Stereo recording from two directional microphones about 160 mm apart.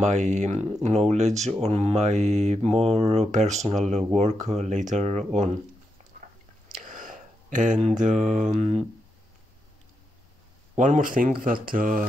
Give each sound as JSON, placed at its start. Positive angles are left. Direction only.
{"t": 0.0, "sound": "mantra", "side_deg": -45}
{"t": 6.1, "sound": "biting", "side_deg": -55}
{"t": 6.7, "sound": "a sound", "side_deg": -55}
{"t": 8.0, "sound": "mantra", "side_deg": -50}
{"t": 10.8, "sound": "speech", "side_deg": -55}